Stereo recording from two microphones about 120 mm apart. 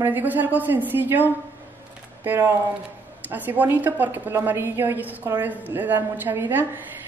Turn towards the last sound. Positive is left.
turn(degrees=-15)  # may be behind; listen again after turning